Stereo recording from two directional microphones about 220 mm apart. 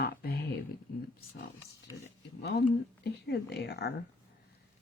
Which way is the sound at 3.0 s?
45° left (ahead or behind).